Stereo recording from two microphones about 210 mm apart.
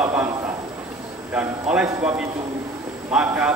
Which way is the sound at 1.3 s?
5° right (ahead or behind).